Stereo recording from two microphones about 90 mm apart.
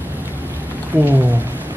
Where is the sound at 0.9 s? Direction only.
20° right (ahead or behind).